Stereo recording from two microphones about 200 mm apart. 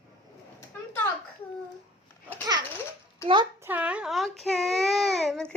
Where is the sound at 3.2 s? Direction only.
20° right (ahead or behind).